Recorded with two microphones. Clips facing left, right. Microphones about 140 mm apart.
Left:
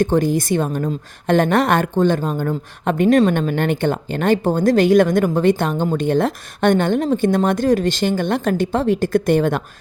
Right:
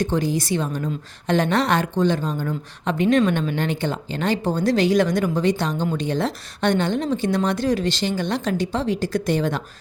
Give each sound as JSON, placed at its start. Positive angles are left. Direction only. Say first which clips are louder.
{"t": 0.0, "sound": "a woman's voice", "louder": "left 5 dB", "side_deg": 50}